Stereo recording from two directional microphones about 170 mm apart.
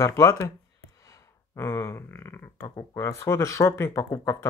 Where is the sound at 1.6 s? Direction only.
15° left (ahead or behind).